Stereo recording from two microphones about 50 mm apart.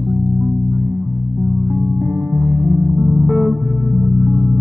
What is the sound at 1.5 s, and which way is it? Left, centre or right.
Music, right.